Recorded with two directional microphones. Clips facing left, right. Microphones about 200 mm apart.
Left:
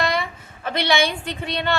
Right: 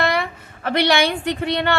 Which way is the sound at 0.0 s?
60° right (ahead or behind).